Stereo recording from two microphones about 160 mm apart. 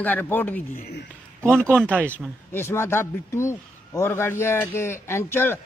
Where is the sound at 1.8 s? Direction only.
5° left (ahead or behind).